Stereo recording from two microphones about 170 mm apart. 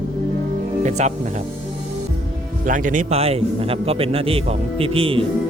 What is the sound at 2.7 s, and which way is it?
A man's voice, 50° right (ahead or behind).